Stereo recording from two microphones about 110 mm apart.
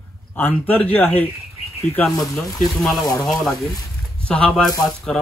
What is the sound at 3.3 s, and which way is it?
Speech, 5° left (ahead or behind).